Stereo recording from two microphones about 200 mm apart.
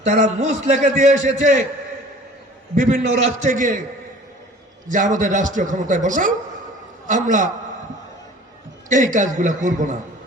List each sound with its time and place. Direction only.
0.1 s a man's voice: 35° right (ahead or behind)
2.7 s a man's voice: 40° right (ahead or behind)
4.9 s a man's voice: 40° right (ahead or behind)
8.9 s a man's voice: 40° right (ahead or behind)